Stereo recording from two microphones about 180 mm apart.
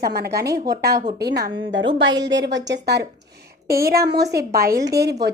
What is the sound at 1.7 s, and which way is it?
Speech, 90° right.